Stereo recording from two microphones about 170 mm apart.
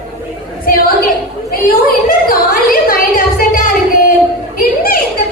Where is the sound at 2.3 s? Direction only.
55° left (ahead or behind).